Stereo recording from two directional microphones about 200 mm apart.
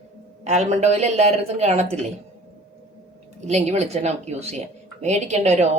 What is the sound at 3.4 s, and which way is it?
A woman's voice, 35° right (ahead or behind).